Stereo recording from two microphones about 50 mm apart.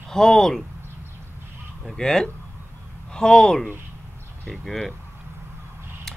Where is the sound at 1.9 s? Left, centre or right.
Centre.